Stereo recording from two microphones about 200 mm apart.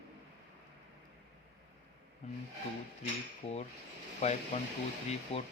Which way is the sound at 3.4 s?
30° left (ahead or behind).